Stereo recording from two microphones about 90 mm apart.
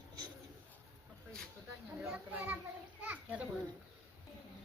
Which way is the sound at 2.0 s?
15° right (ahead or behind).